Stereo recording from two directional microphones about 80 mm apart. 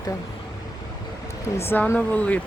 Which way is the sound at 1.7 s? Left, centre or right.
Left.